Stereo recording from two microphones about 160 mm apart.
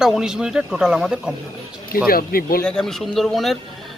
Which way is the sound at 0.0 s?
5° right (ahead or behind).